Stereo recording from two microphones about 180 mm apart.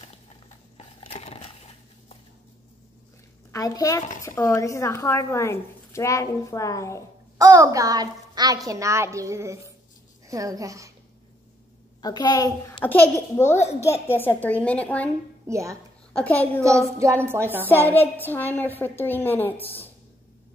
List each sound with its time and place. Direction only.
0.7 s a sound: 35° left (ahead or behind)
3.5 s a woman's voice: 20° left (ahead or behind)
7.3 s a child's voice: 20° right (ahead or behind)
12.0 s a woman's voice: 20° left (ahead or behind)
15.4 s speech: 15° right (ahead or behind)
16.1 s a woman's voice: 10° left (ahead or behind)
17.0 s a child's voice: 15° right (ahead or behind)
17.6 s a woman's voice: 10° left (ahead or behind)